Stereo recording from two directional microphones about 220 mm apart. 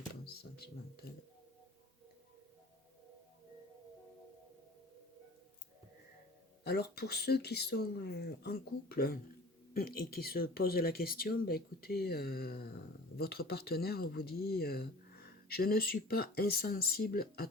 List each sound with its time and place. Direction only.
0.3 s cash register: 45° left (ahead or behind)
6.7 s speech: 45° left (ahead or behind)